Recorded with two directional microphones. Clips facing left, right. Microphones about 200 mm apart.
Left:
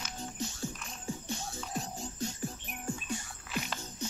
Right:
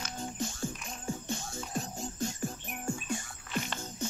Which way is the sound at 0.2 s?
50° right (ahead or behind).